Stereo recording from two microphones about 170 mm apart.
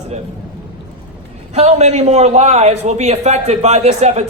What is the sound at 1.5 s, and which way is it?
A man's voice, 40° right (ahead or behind).